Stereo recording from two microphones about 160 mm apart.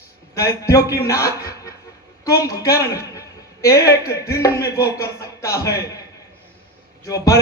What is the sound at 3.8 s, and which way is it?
A man's voice, 20° left (ahead or behind).